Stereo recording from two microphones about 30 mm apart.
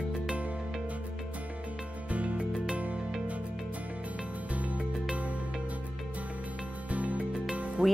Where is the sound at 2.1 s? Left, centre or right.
Right.